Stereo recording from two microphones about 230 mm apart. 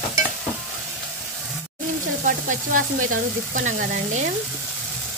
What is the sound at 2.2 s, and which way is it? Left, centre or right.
Stir, right.